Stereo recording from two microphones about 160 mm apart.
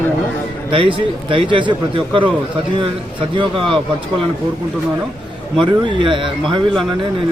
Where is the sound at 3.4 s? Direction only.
30° right (ahead or behind).